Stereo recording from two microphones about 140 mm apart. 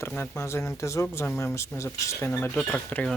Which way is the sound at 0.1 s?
15° left (ahead or behind).